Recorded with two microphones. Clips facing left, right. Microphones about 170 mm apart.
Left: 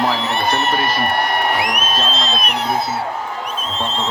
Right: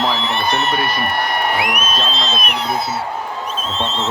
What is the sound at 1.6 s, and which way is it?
Speech, 40° left (ahead or behind).